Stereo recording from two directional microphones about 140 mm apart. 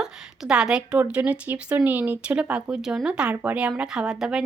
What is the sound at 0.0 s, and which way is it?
A woman's voice, 5° right (ahead or behind).